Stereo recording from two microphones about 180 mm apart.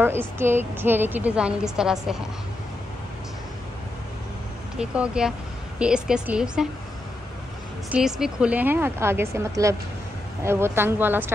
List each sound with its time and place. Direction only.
0.0 s a woman's voice: 10° right (ahead or behind)
4.7 s a woman's voice: 5° right (ahead or behind)
7.9 s a woman's voice: 5° right (ahead or behind)